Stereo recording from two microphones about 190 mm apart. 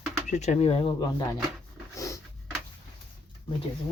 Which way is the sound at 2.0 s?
15° left (ahead or behind).